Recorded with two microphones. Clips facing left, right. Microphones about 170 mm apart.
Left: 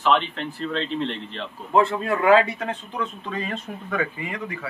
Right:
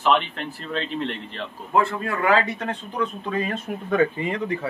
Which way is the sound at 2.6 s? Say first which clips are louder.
Right 1 dB; 5° left (ahead or behind).